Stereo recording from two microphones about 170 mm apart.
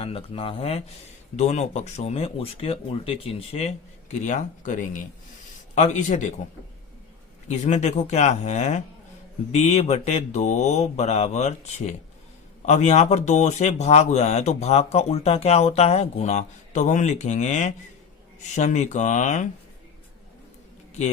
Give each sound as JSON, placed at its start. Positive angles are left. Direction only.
{"t": 0.0, "sound": "speech", "side_deg": 35}
{"t": 7.4, "sound": "speech", "side_deg": 45}